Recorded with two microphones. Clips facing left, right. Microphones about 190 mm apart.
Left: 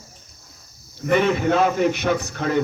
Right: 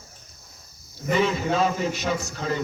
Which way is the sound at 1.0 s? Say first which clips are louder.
Left 4 dB; 65° left (ahead or behind).